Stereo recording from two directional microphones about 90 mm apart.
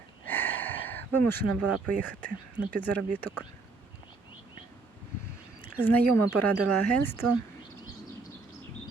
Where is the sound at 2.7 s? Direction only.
20° left (ahead or behind).